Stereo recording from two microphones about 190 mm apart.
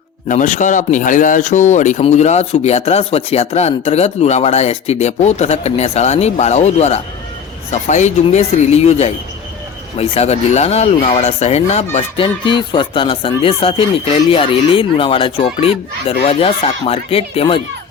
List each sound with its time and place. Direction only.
0.3 s speech: 40° left (ahead or behind)